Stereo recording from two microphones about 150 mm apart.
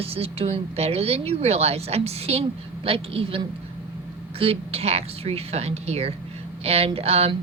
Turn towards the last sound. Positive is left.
turn(degrees=-40)  # may be behind; listen again after turning